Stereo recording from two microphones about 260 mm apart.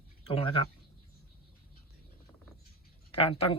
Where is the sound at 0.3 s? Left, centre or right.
Left.